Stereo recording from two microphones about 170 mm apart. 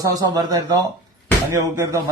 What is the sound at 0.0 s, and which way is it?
A man's voice, 25° right (ahead or behind).